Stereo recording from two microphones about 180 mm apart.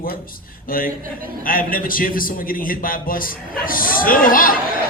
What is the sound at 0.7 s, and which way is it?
A man's voice, 50° left (ahead or behind).